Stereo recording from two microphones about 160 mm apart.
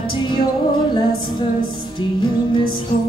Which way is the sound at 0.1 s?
30° left (ahead or behind).